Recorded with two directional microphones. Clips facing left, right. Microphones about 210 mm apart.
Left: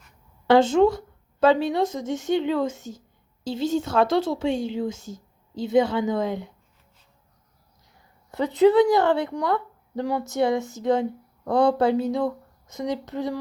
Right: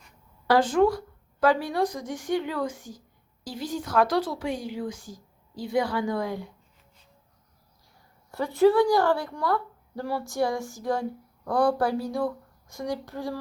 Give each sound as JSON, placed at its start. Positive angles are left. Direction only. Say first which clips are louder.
{"t": 0.4, "sound": "a woman's voice", "louder": "left 4 dB", "side_deg": 25}
{"t": 8.3, "sound": "a woman's voice", "louder": "left 3 dB", "side_deg": 20}